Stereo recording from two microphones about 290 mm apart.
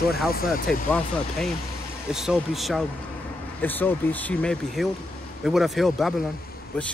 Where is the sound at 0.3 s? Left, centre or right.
Left.